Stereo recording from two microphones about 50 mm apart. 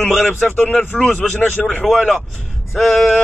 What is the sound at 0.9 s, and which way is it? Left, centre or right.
Speech, left.